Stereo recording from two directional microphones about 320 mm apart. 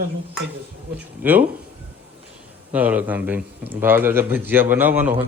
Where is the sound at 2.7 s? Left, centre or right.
Centre.